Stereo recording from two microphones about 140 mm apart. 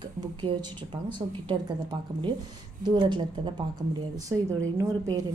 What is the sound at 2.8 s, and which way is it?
A woman's voice, 35° right (ahead or behind).